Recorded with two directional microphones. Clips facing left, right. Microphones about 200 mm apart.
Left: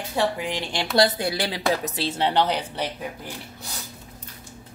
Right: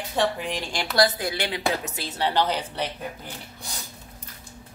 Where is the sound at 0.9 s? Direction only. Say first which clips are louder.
Left 2 dB; 30° left (ahead or behind).